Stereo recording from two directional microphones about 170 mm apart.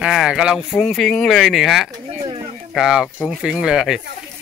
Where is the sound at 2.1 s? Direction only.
30° right (ahead or behind).